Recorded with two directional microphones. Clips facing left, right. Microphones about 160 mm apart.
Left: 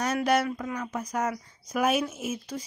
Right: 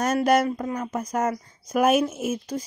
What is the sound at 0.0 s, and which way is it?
Speech, 45° right (ahead or behind).